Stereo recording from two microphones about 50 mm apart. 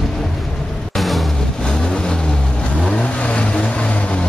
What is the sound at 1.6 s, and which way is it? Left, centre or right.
Vehicle, centre.